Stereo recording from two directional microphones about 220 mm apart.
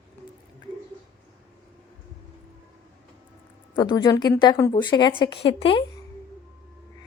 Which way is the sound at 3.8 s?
20° left (ahead or behind).